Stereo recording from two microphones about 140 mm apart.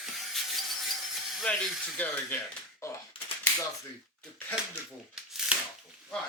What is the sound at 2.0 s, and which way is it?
Speech, 15° left (ahead or behind).